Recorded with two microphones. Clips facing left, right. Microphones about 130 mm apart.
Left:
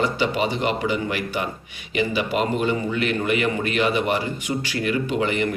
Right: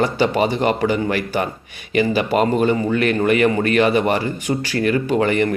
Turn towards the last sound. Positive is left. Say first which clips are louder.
# right 5 dB
turn(degrees=-50)  # may be behind; listen again after turning